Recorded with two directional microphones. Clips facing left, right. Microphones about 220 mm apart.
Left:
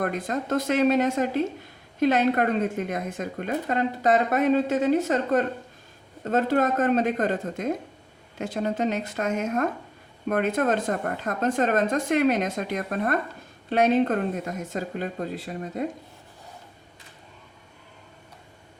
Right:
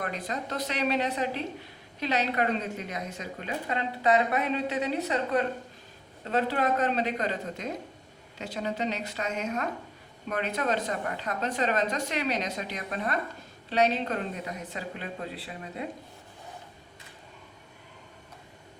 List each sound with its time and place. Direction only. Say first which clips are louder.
0.0 s a woman's voice: left 6 dB; 50° left (ahead or behind)